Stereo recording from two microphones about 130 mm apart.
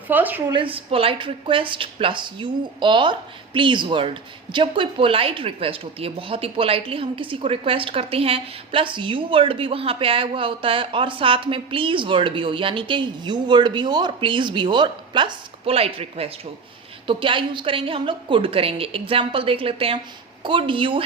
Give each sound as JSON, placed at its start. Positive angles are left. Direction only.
{"t": 0.1, "sound": "a woman's voice", "side_deg": -15}
{"t": 0.4, "sound": "a woman's voice", "side_deg": -40}